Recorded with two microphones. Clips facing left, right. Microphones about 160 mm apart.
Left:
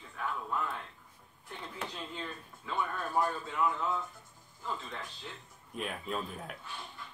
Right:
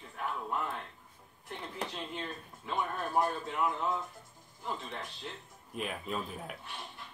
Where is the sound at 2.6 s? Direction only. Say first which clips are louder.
Right 1 dB; 25° right (ahead or behind).